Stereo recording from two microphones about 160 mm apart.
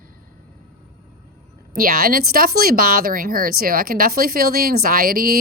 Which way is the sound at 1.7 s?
65° right (ahead or behind).